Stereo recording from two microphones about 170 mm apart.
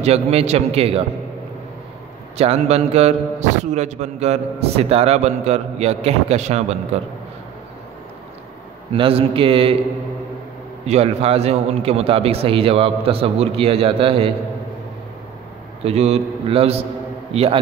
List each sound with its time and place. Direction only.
0.0 s a man's voice: 35° right (ahead or behind)
2.3 s a man's voice: 40° right (ahead or behind)
8.9 s a man's voice: 30° right (ahead or behind)
10.9 s a man's voice: 35° right (ahead or behind)
15.8 s a man's voice: 40° right (ahead or behind)